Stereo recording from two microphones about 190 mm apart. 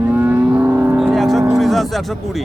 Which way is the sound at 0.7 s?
Centre (ahead or behind).